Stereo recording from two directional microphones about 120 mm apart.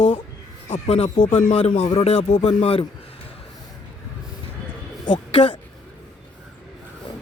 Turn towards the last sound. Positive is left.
turn(degrees=45)  # may be behind; listen again after turning